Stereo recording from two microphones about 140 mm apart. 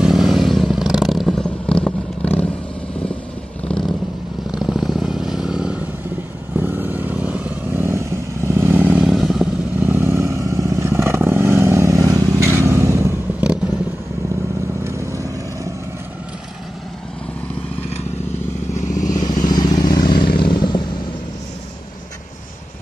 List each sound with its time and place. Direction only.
0.0 s vehicle: centre (ahead or behind)
3.6 s vehicle: 5° left (ahead or behind); by 9.1 s 10° right (ahead or behind)
9.1 s vehicle: centre (ahead or behind)
9.8 s vehicle: 15° right (ahead or behind)
14.9 s vehicle: 20° right (ahead or behind)
18.9 s vehicle: 70° left (ahead or behind)
19.4 s vehicle: 30° left (ahead or behind)
20.2 s vehicle: 90° left
20.5 s vehicle: 30° left (ahead or behind)